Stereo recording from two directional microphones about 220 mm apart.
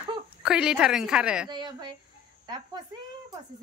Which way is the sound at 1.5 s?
20° right (ahead or behind).